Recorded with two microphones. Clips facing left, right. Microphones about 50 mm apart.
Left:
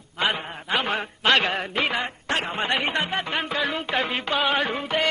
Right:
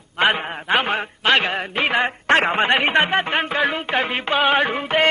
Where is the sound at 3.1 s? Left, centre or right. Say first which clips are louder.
Right 6 dB; right.